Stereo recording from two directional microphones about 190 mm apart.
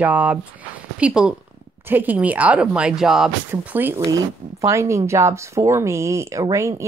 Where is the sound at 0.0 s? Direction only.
10° right (ahead or behind).